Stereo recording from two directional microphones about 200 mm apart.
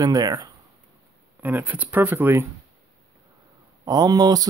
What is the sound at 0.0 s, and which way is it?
Speech, 20° right (ahead or behind).